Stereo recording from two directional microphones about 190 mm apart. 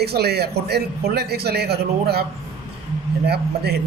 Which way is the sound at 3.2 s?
60° right (ahead or behind).